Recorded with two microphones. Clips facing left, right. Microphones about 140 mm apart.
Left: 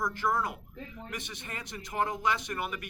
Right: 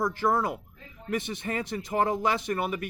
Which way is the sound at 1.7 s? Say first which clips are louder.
Right 5 dB; 30° right (ahead or behind).